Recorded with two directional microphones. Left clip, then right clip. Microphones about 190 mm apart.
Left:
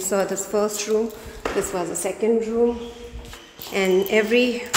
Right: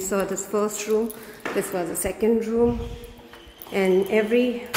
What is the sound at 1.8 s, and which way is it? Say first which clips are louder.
Speech: left 1 dB; 15° right (ahead or behind).